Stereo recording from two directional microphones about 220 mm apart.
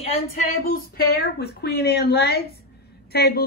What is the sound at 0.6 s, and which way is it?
A woman's voice, 45° left (ahead or behind).